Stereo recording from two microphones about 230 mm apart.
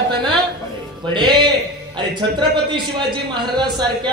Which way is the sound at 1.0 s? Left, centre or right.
Centre.